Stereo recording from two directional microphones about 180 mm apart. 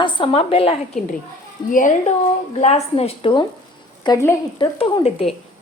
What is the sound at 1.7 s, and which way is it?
A woman's voice, 45° left (ahead or behind).